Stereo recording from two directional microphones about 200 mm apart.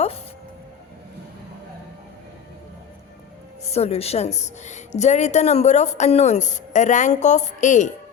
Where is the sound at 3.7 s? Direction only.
30° left (ahead or behind).